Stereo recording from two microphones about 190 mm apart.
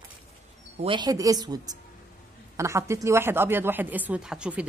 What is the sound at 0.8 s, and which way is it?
A woman's voice, 25° right (ahead or behind).